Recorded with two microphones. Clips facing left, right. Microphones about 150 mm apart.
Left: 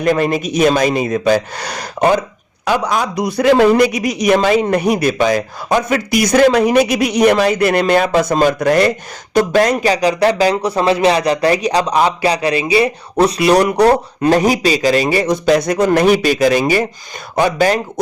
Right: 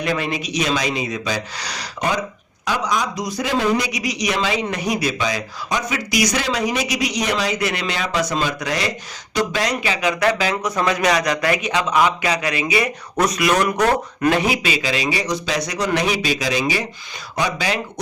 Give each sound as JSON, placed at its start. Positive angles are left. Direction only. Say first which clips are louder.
{"t": 0.0, "sound": "a man's voice", "louder": "left 8 dB", "side_deg": 45}